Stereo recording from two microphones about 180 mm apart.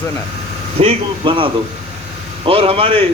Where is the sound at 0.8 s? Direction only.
30° right (ahead or behind).